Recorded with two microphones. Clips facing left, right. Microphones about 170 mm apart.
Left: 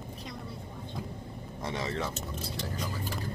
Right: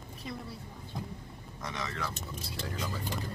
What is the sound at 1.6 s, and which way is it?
Speech, 30° left (ahead or behind).